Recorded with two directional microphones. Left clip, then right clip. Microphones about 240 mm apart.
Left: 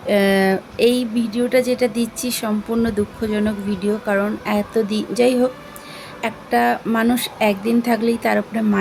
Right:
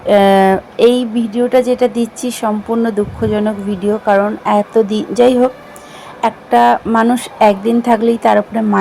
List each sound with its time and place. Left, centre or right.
0.1 s speech: centre